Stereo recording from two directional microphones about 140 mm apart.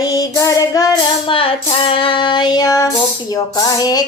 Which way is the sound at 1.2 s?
40° left (ahead or behind).